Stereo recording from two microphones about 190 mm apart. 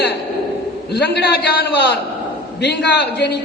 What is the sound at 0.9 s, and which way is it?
Speech, 60° left (ahead or behind).